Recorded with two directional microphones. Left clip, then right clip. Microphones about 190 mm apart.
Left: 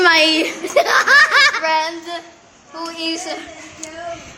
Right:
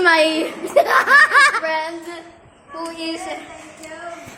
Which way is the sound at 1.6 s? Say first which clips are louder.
Left 4 dB; 20° left (ahead or behind).